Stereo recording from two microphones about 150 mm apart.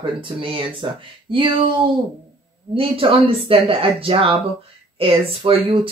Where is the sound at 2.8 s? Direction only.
40° right (ahead or behind).